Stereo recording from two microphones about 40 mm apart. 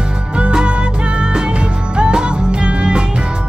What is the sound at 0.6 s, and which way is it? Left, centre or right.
Music, right.